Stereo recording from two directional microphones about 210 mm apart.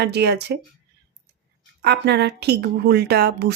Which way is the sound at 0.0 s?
50° right (ahead or behind).